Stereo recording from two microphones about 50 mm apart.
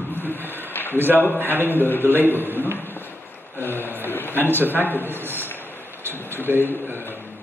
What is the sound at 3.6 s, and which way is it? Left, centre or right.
Speech, left.